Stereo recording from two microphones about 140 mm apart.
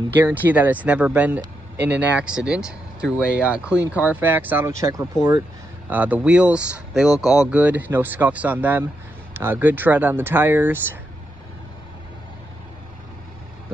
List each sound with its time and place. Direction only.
0.1 s speech: 15° right (ahead or behind)
5.9 s speech: 10° right (ahead or behind)